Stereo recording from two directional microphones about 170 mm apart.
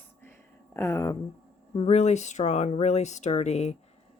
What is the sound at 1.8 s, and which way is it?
Speech, 40° left (ahead or behind).